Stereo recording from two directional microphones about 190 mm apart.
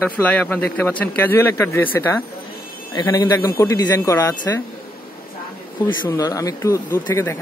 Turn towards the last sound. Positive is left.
turn(degrees=15)  # may be behind; listen again after turning